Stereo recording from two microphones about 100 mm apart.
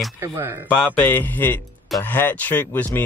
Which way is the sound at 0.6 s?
15° left (ahead or behind).